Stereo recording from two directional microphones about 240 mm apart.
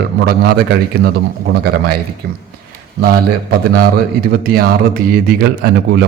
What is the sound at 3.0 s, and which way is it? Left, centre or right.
Speech, right.